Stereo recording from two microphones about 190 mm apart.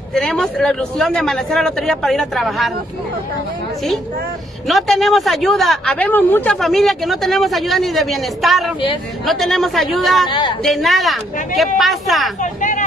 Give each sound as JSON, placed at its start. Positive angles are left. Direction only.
{"t": 0.1, "sound": "speech", "side_deg": 0}
{"t": 4.6, "sound": "speech", "side_deg": 0}
{"t": 12.4, "sound": "speech", "side_deg": 40}